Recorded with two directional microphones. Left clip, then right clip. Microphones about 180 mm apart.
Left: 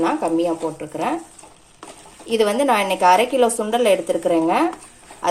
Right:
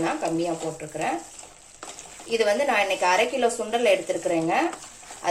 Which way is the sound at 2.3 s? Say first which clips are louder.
Left 4 dB; 50° left (ahead or behind).